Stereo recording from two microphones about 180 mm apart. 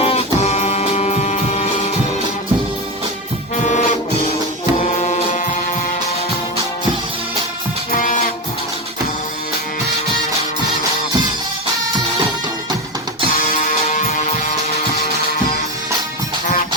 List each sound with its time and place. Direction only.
0.0 s music: 35° left (ahead or behind)
3.6 s music: 45° left (ahead or behind)
7.9 s music: 45° left (ahead or behind)